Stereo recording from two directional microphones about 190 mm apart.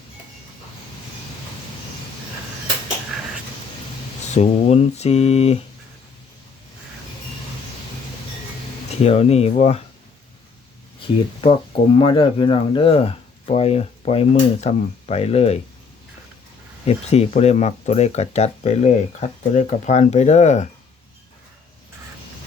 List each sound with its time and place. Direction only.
4.4 s speech: 35° left (ahead or behind)
9.0 s speech: 35° left (ahead or behind)
11.0 s speech: 25° left (ahead or behind)
16.8 s speech: 35° left (ahead or behind)